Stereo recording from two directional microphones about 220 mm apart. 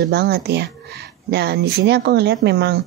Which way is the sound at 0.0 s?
45° right (ahead or behind).